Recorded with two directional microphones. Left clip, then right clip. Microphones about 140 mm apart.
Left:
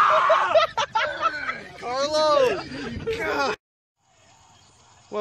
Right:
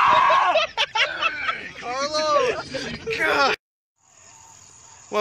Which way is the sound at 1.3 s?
75° left (ahead or behind).